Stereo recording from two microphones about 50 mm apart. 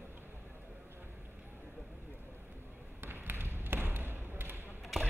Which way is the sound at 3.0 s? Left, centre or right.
Right.